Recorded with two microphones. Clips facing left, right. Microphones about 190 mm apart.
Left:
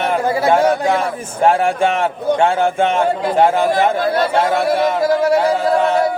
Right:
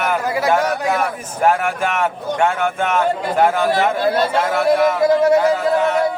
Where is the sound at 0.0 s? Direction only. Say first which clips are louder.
Left 3 dB; 30° left (ahead or behind).